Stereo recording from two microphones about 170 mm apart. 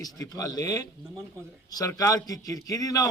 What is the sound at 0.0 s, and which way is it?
A man's voice, 20° left (ahead or behind).